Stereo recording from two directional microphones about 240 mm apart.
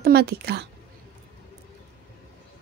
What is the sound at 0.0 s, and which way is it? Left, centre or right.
Speech, right.